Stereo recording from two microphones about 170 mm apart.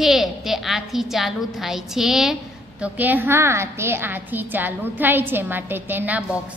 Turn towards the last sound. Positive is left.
turn(degrees=-10)  # may be behind; listen again after turning